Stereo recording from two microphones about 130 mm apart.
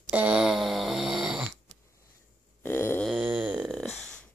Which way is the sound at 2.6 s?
20° left (ahead or behind).